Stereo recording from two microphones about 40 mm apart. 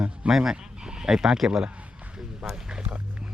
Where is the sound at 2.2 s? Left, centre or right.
Centre.